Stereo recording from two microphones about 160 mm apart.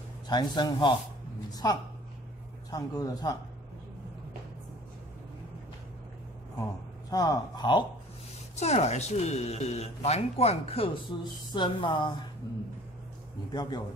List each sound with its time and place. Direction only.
0.3 s a woman's voice: 25° left (ahead or behind)
7.1 s speech: 25° left (ahead or behind)
8.5 s speech: 45° left (ahead or behind)
13.5 s speech: 25° left (ahead or behind)